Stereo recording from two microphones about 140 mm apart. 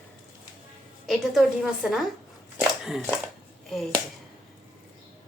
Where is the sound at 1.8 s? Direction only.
5° right (ahead or behind).